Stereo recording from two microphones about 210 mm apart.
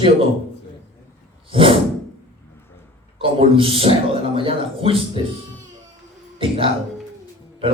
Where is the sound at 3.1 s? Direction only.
25° right (ahead or behind).